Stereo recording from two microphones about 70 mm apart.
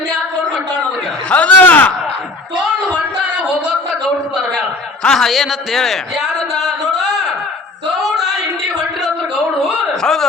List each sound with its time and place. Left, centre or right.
1.3 s a sound: centre
5.0 s a man's voice: centre
10.0 s speech: centre